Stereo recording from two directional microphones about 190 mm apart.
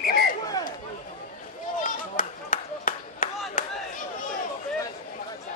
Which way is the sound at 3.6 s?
45° left (ahead or behind).